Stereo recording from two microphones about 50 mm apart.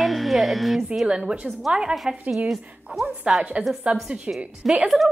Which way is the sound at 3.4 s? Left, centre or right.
Right.